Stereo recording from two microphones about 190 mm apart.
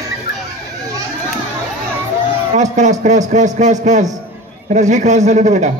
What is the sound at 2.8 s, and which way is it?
Speech, 40° right (ahead or behind).